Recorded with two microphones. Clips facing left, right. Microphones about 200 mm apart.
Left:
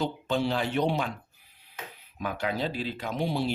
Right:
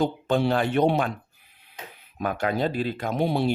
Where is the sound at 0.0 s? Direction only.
55° right (ahead or behind).